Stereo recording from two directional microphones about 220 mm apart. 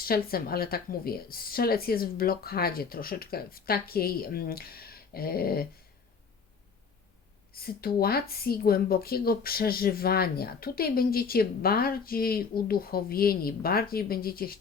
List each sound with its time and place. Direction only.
0.0 s speech: 45° left (ahead or behind)
7.5 s speech: 45° left (ahead or behind)